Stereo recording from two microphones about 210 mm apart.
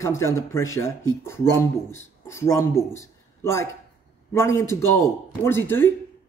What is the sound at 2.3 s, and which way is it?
A man's voice, 15° left (ahead or behind).